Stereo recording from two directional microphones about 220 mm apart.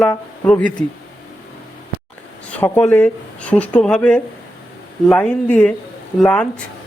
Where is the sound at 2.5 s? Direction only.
10° left (ahead or behind).